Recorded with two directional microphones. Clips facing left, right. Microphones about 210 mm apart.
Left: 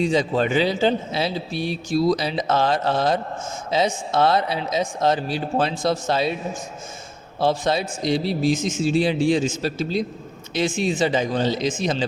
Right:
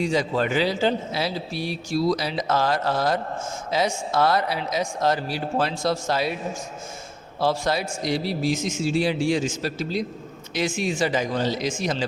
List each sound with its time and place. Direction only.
0.0 s a man's voice: 25° left (ahead or behind)
7.3 s a man's voice: 25° left (ahead or behind)